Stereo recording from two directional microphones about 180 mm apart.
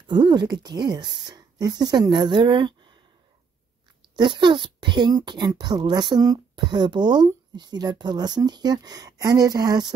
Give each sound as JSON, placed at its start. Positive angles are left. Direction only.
{"t": 0.1, "sound": "speech", "side_deg": -25}
{"t": 4.2, "sound": "speech", "side_deg": -25}